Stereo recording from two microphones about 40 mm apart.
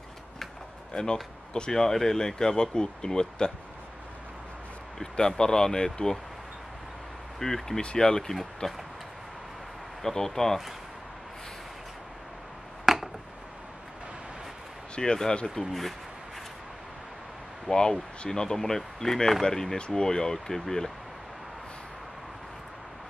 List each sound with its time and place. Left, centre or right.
0.9 s speech: centre
4.9 s speech: centre
7.3 s speech: centre
10.0 s speech: centre
12.8 s a sound: centre
15.0 s speech: centre
17.6 s speech: centre